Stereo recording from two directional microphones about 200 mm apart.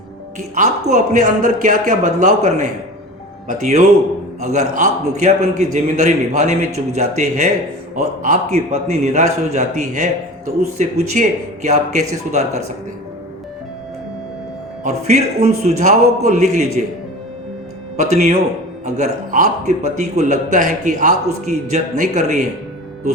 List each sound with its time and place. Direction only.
0.3 s a man's voice: 35° right (ahead or behind)
14.8 s a man's voice: 35° right (ahead or behind)
17.9 s a man's voice: 35° right (ahead or behind)